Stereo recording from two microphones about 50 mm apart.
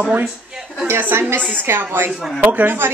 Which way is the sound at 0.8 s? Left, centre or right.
Right.